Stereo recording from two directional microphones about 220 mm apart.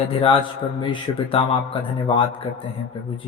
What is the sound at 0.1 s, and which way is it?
Speech, 25° left (ahead or behind).